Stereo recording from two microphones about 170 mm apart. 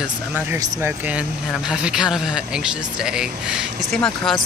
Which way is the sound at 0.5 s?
20° right (ahead or behind).